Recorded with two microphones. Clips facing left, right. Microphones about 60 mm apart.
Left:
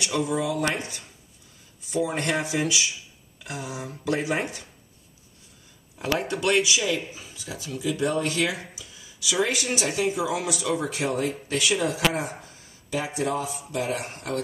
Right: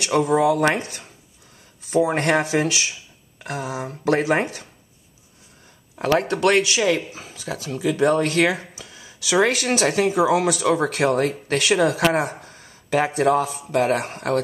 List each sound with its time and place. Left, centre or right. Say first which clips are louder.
0.0 s speech: right 8 dB; right
2.1 s speech: right 6 dB; right
5.9 s speech: right 7 dB; right